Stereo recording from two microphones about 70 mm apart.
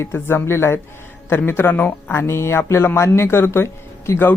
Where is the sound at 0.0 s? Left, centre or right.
Left.